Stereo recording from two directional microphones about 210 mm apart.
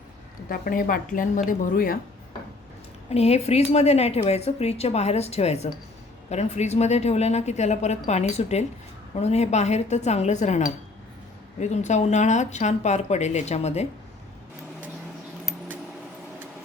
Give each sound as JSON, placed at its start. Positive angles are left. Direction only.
{"t": 0.4, "sound": "speech", "side_deg": 45}
{"t": 3.1, "sound": "speech", "side_deg": 30}